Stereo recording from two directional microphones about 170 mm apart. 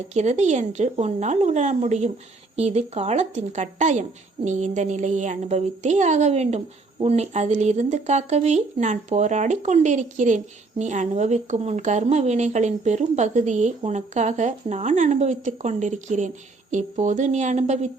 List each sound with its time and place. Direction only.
0.1 s a woman's voice: 40° right (ahead or behind)